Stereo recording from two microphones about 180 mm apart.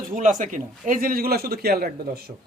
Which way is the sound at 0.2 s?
45° right (ahead or behind).